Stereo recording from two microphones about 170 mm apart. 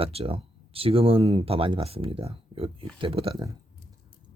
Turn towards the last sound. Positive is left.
turn(degrees=-30)  # may be behind; listen again after turning